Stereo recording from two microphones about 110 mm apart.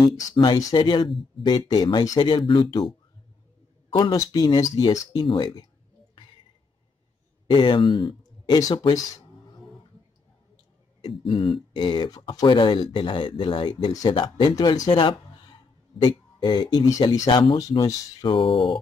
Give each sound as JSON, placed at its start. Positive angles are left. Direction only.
{"t": 0.2, "sound": "speech", "side_deg": 40}
{"t": 3.9, "sound": "speech", "side_deg": 35}
{"t": 7.4, "sound": "speech", "side_deg": 45}
{"t": 11.0, "sound": "speech", "side_deg": 45}
{"t": 17.8, "sound": "speech", "side_deg": 45}